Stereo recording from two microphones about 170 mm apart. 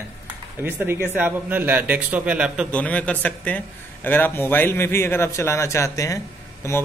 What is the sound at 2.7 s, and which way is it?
A man's voice, 10° left (ahead or behind).